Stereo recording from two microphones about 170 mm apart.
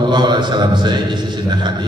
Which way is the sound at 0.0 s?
25° right (ahead or behind).